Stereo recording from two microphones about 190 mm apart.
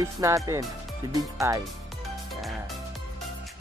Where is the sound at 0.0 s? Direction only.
15° right (ahead or behind).